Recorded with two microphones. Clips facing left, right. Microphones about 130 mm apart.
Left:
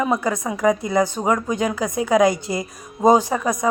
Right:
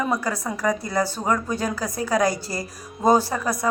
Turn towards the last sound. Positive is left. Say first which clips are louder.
# left 3 dB
turn(degrees=15)  # may be behind; listen again after turning